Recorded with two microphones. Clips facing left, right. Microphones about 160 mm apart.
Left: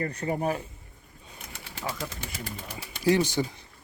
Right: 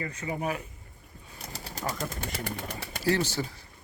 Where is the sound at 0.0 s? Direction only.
55° left (ahead or behind).